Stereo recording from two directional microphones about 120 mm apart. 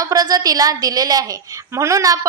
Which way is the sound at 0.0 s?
30° right (ahead or behind).